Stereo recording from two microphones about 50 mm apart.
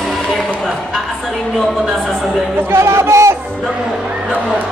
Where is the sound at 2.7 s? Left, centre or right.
Right.